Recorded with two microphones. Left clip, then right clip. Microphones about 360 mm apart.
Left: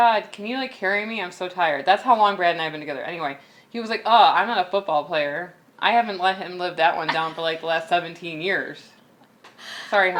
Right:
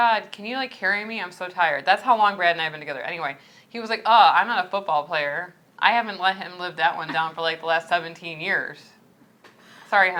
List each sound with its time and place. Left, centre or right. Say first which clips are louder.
0.0 s speech: left 2 dB; right
9.9 s speech: right 1 dB; right